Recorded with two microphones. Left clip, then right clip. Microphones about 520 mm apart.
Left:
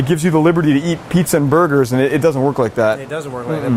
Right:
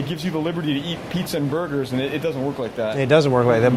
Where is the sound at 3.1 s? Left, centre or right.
Right.